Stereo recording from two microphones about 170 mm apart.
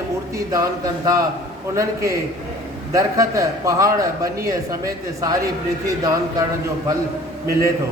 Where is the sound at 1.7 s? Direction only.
15° right (ahead or behind).